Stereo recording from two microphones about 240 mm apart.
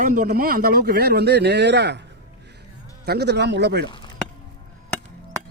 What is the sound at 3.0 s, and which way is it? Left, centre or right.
Speech, right.